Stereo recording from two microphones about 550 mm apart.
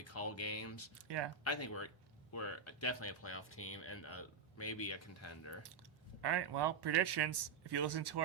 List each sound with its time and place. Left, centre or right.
0.0 s speech: left
0.9 s speech: right
1.5 s speech: left
6.2 s speech: right